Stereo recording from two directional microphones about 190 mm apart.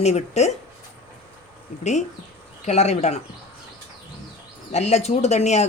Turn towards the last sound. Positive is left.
turn(degrees=35)  # may be behind; listen again after turning